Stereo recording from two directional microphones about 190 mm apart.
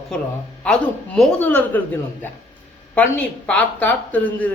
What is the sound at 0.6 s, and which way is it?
Speech, 5° left (ahead or behind).